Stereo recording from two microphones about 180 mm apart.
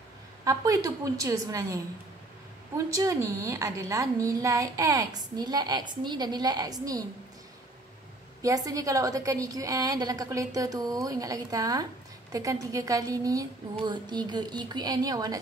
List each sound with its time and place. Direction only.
0.5 s a woman's voice: 20° right (ahead or behind)
2.9 s a woman's voice: 15° right (ahead or behind)
8.4 s a woman's voice: 20° right (ahead or behind)